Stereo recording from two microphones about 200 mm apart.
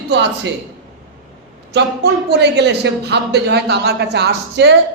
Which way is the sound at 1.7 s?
55° right (ahead or behind).